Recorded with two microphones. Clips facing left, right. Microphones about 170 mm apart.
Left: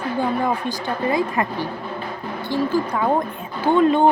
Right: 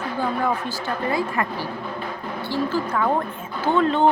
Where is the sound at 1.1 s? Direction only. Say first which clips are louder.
Left 3 dB; 20° left (ahead or behind).